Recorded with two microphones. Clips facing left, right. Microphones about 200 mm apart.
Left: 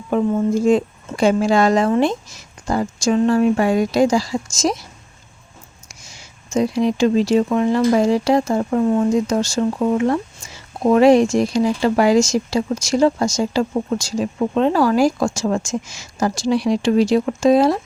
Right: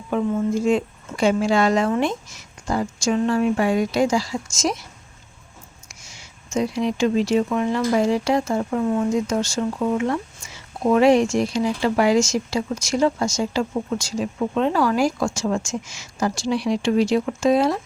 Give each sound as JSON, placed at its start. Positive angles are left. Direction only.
{"t": 0.1, "sound": "speech", "side_deg": 40}
{"t": 5.9, "sound": "speech", "side_deg": 35}